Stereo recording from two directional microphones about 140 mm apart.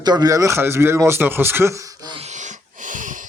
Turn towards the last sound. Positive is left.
turn(degrees=-65)  # may be behind; listen again after turning